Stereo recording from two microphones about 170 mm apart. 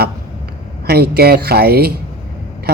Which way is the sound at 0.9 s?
70° right (ahead or behind).